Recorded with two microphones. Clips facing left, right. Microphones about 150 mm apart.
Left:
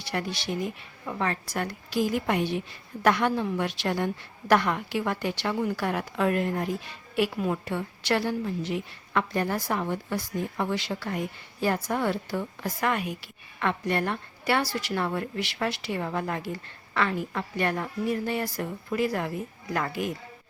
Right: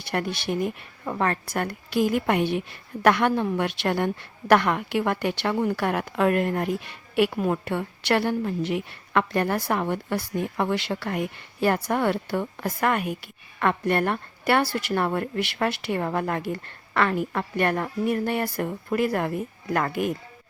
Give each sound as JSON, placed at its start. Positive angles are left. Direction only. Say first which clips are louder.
{"t": 0.0, "sound": "a woman's voice", "louder": "right 4 dB", "side_deg": -55}